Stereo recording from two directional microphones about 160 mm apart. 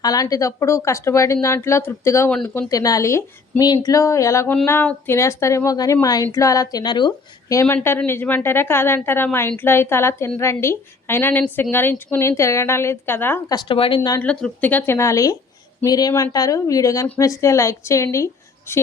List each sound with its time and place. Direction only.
0.0 s a woman's voice: 25° left (ahead or behind); by 2.6 s 5° left (ahead or behind)
2.6 s a woman's voice: 20° left (ahead or behind)
13.7 s speech: 35° left (ahead or behind)
14.2 s a woman's voice: 10° left (ahead or behind)